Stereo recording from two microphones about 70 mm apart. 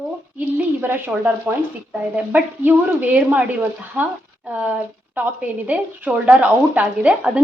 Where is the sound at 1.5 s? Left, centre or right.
Right.